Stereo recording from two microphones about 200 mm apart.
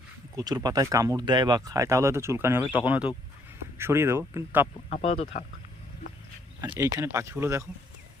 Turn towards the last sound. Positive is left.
turn(degrees=-15)  # may be behind; listen again after turning